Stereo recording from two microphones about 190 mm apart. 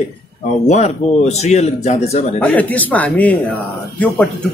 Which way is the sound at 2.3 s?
5° left (ahead or behind).